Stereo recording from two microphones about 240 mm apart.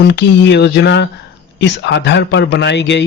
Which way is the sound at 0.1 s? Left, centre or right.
Left.